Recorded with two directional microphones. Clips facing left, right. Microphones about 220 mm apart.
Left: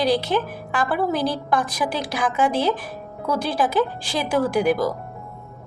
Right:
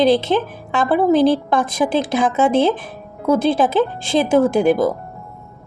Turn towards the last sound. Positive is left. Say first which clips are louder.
# right 5 dB
turn(degrees=-25)  # may be behind; listen again after turning